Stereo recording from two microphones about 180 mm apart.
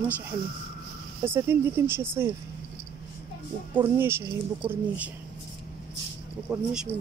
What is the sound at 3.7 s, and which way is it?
Speech, 10° right (ahead or behind).